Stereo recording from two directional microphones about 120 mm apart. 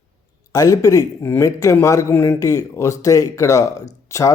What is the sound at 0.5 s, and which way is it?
Speech, 30° left (ahead or behind).